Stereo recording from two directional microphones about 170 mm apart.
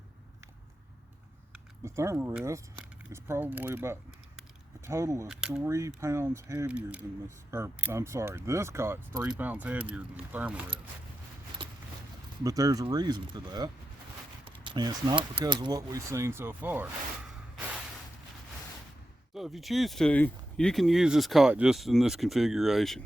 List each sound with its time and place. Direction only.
1.8 s speech: 15° right (ahead or behind)
5.3 s speech: 5° right (ahead or behind)
5.6 s speech: 20° right (ahead or behind)
11.6 s a sound: 30° right (ahead or behind)
12.4 s speech: 20° right (ahead or behind)
14.4 s a sound: 30° right (ahead or behind)
15.4 s speech: 25° right (ahead or behind); by 16.9 s 10° right (ahead or behind)
19.3 s speech: centre (ahead or behind)